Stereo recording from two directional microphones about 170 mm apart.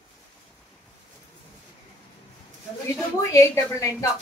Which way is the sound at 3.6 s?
15° left (ahead or behind).